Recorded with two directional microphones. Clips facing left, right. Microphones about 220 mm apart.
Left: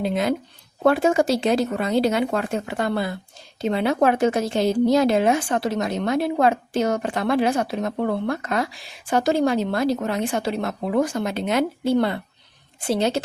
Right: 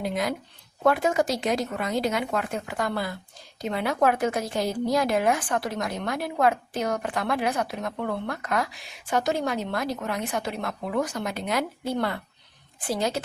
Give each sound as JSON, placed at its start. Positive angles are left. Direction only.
{"t": 0.0, "sound": "a woman's voice", "side_deg": 25}